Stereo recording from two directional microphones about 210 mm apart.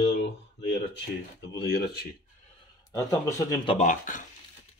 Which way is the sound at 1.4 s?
55° left (ahead or behind).